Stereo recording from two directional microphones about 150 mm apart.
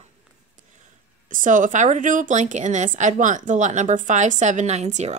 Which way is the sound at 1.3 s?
60° right (ahead or behind).